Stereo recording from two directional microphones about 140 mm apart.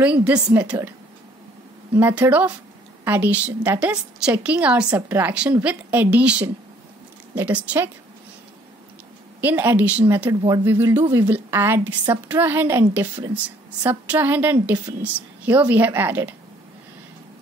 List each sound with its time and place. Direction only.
0.0 s a woman's voice: 10° right (ahead or behind)
2.0 s a woman's voice: 15° right (ahead or behind)
9.4 s a woman's voice: 15° right (ahead or behind)
13.8 s a woman's voice: 15° right (ahead or behind)